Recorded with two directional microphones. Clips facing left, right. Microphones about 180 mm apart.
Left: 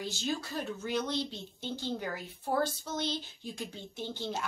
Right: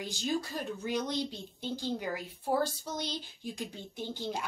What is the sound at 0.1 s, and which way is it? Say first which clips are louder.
Speech: right 2 dB; 15° right (ahead or behind).